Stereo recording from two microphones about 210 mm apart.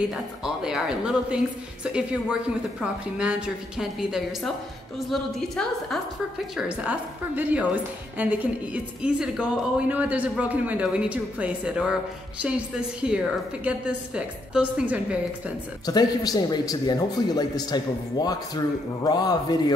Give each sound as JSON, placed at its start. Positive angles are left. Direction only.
{"t": 0.1, "sound": "a woman's voice", "side_deg": 0}
{"t": 15.8, "sound": "a man's voice", "side_deg": 20}